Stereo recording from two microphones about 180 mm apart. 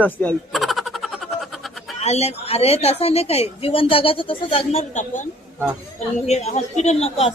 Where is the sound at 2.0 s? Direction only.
35° left (ahead or behind).